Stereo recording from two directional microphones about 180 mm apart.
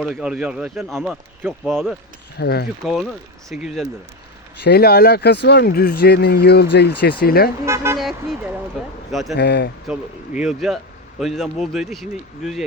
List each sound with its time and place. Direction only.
0.0 s speech: 5° right (ahead or behind)
2.4 s speech: 60° left (ahead or behind)
2.8 s speech: centre (ahead or behind)
4.6 s speech: 60° left (ahead or behind)
7.6 s speech: 15° right (ahead or behind)
7.9 s speech: centre (ahead or behind)
9.3 s speech: 65° left (ahead or behind)
9.8 s speech: 5° right (ahead or behind)